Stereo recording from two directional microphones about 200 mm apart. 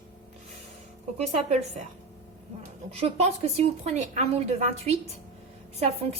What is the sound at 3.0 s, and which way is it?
A woman's voice, 30° right (ahead or behind).